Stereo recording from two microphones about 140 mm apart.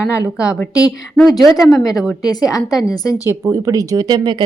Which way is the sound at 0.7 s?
25° left (ahead or behind).